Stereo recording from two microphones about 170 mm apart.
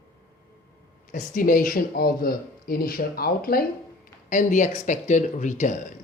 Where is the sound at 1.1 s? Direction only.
50° left (ahead or behind).